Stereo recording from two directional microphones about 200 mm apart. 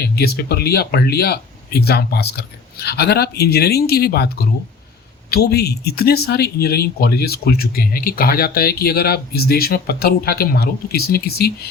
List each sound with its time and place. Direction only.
0.0 s speech: 50° left (ahead or behind)